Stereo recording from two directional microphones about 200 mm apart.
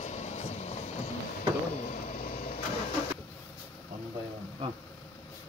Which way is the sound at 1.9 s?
35° left (ahead or behind).